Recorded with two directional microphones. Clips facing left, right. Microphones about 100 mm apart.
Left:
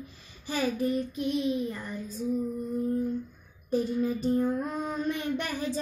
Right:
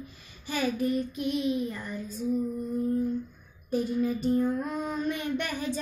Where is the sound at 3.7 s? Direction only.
35° left (ahead or behind).